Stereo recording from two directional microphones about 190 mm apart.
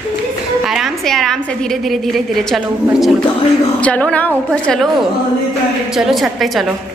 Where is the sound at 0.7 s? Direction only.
Centre (ahead or behind).